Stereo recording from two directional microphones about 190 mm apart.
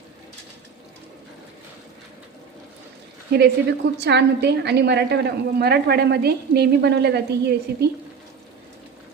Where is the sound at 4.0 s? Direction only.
60° right (ahead or behind).